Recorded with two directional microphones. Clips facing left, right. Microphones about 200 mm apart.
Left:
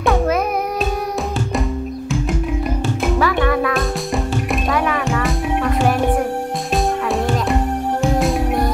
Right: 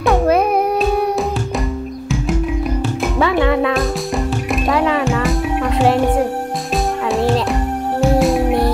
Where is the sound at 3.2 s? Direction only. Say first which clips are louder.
Right 4 dB; 25° right (ahead or behind).